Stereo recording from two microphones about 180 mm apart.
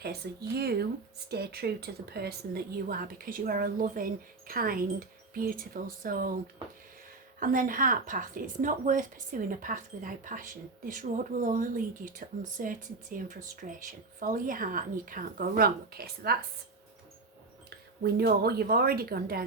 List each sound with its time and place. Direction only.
0.0 s speech: 60° right (ahead or behind)
7.3 s speech: 50° right (ahead or behind)
18.0 s speech: 60° right (ahead or behind)